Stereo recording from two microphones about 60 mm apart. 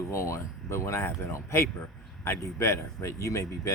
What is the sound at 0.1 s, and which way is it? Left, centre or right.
A man's voice, left.